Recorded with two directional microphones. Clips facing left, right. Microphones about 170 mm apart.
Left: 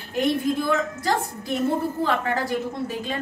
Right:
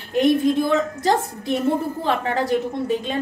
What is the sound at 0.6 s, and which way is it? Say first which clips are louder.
Speech: right 4 dB; 25° right (ahead or behind).